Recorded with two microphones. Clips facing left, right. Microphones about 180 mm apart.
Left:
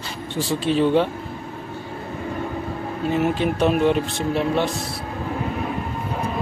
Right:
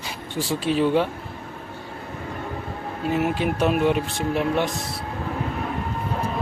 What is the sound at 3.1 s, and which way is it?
Speech, 5° right (ahead or behind).